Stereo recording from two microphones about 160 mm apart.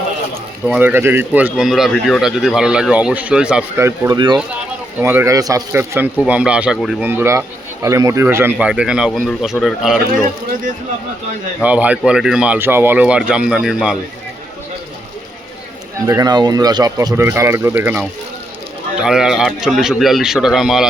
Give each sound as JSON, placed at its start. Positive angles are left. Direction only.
{"t": 0.8, "sound": "speech", "side_deg": -15}
{"t": 8.5, "sound": "speech", "side_deg": -5}
{"t": 11.6, "sound": "speech", "side_deg": -10}
{"t": 16.0, "sound": "speech", "side_deg": -20}